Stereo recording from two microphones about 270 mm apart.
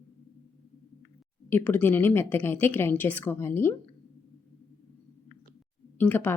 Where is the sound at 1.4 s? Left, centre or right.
Centre.